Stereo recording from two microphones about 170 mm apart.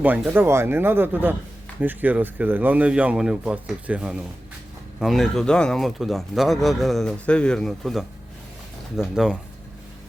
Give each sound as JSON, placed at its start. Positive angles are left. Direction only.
{"t": 0.0, "sound": "speech", "side_deg": -10}